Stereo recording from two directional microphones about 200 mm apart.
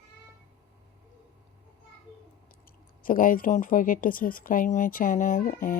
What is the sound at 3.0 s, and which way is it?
Speech, 45° left (ahead or behind).